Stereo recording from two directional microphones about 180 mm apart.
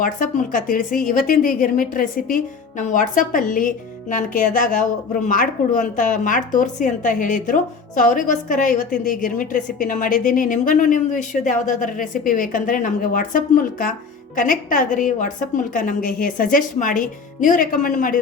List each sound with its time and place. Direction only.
0.0 s a woman's voice: 50° left (ahead or behind)